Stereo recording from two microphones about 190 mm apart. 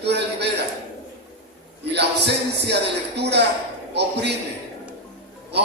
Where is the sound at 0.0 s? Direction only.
60° right (ahead or behind).